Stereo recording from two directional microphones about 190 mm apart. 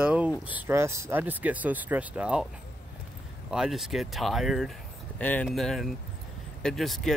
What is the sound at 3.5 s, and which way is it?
Speech, centre (ahead or behind).